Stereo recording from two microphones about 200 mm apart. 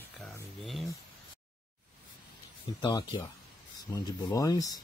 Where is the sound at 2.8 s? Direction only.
20° left (ahead or behind).